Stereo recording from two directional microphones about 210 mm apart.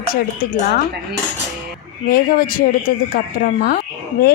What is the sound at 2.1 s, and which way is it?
A woman's voice, 45° left (ahead or behind).